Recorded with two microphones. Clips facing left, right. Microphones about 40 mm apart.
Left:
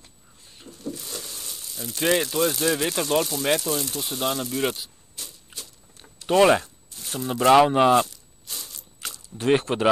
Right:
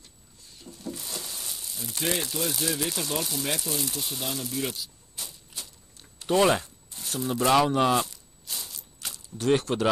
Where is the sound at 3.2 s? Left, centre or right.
Centre.